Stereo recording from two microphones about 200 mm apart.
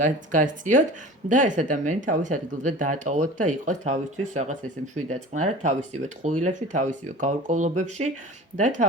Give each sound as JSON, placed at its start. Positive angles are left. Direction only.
{"t": 0.0, "sound": "speech", "side_deg": -40}
{"t": 5.0, "sound": "speech", "side_deg": -35}